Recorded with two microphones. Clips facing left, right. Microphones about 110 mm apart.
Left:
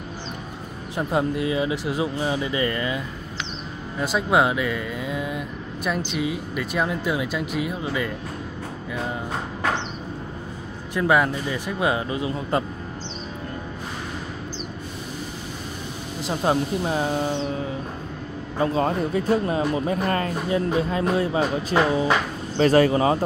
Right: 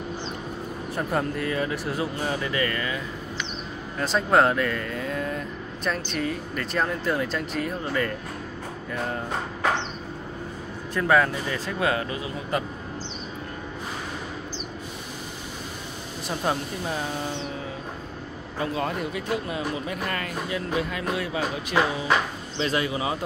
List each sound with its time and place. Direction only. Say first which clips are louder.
0.9 s speech: left 4 dB; 15° left (ahead or behind)
4.0 s speech: even; 10° left (ahead or behind)
11.0 s speech: left 1 dB; 15° left (ahead or behind)
16.3 s speech: left 5 dB; 30° left (ahead or behind)
18.6 s speech: left 6 dB; 35° left (ahead or behind)
22.6 s speech: left 9 dB; 45° left (ahead or behind)